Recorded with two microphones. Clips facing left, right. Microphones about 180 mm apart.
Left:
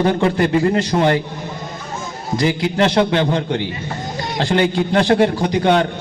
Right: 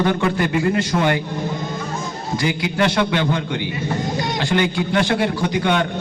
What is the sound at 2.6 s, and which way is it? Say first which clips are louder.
A man's voice: left 3 dB; 35° left (ahead or behind).